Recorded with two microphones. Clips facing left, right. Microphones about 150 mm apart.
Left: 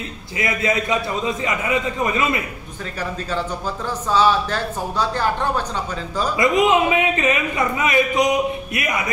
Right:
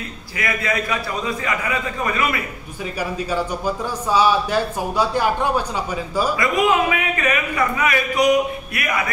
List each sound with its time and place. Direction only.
0.4 s a man's voice: 20° left (ahead or behind)
3.0 s speech: 10° right (ahead or behind)
6.3 s a man's voice: 20° left (ahead or behind)